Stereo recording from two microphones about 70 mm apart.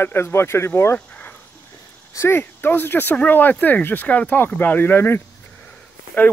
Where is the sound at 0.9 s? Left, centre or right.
Left.